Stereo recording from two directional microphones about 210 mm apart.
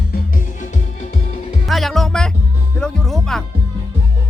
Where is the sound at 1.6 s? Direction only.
Centre (ahead or behind).